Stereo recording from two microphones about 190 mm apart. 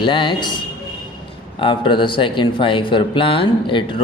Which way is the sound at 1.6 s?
25° left (ahead or behind).